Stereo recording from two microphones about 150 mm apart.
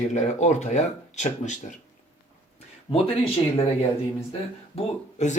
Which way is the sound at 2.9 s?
40° left (ahead or behind).